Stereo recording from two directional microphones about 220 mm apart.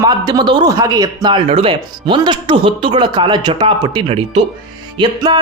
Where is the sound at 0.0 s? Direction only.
20° right (ahead or behind).